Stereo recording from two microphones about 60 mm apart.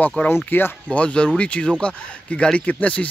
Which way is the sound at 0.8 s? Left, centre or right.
Left.